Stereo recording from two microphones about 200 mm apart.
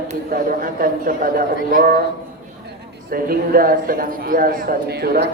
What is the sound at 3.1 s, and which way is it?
A man's voice, 45° right (ahead or behind).